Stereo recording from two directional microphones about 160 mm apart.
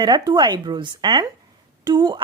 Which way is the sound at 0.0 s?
25° right (ahead or behind).